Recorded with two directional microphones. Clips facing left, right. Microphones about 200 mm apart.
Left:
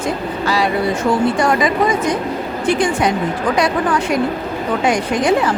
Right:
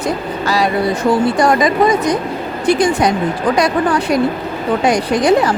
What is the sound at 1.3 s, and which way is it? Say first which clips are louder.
A woman's voice: right 3 dB; 40° right (ahead or behind).